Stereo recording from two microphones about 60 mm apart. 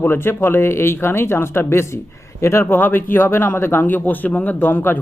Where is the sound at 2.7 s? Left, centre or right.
Left.